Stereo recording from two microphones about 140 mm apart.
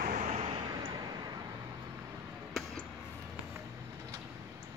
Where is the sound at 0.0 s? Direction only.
65° right (ahead or behind).